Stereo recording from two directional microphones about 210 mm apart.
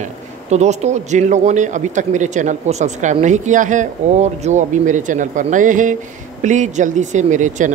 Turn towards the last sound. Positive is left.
turn(degrees=-35)  # may be behind; listen again after turning